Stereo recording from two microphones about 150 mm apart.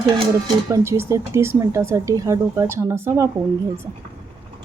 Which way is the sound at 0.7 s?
20° right (ahead or behind).